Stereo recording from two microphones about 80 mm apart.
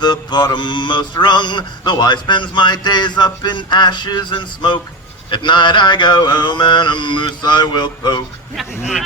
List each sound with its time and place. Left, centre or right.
0.0 s mantra: left